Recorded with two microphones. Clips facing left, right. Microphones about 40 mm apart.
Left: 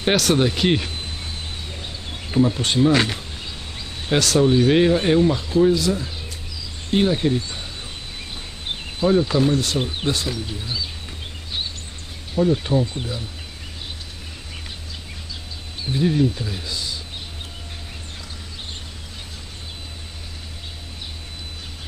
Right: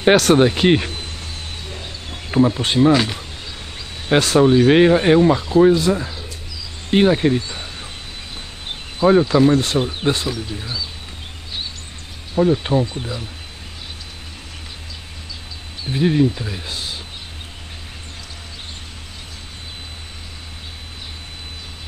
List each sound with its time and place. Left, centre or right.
0.1 s speech: right
2.3 s speech: right
2.9 s speech: centre
4.1 s speech: right
9.0 s speech: right
10.2 s speech: centre
12.4 s speech: right
15.9 s speech: right
16.6 s a sound: right